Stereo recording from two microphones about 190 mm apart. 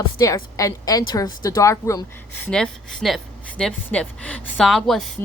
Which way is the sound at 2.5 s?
5° left (ahead or behind).